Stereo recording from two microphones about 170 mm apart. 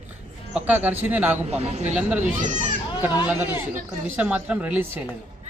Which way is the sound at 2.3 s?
45° right (ahead or behind).